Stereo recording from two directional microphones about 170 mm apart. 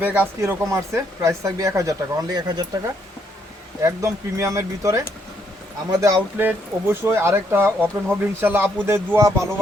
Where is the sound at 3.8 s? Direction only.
20° right (ahead or behind).